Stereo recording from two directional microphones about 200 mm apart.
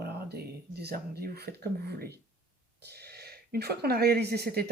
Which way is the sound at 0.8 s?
55° right (ahead or behind).